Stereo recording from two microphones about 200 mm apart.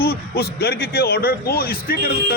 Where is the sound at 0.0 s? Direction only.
50° left (ahead or behind).